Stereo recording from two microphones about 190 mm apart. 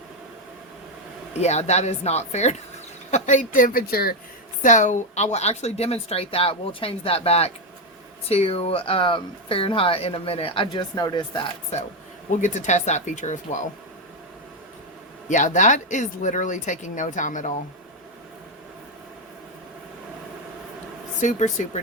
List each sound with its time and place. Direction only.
1.4 s a woman's voice: 35° left (ahead or behind)
12.4 s a woman's voice: 40° left (ahead or behind)
15.3 s a woman's voice: 40° left (ahead or behind)
21.2 s a woman's voice: 40° left (ahead or behind)